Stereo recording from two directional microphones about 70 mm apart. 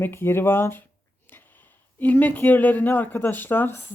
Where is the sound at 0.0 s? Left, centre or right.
Left.